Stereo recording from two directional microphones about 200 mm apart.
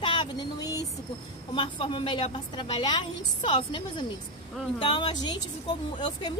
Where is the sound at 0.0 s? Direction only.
25° left (ahead or behind).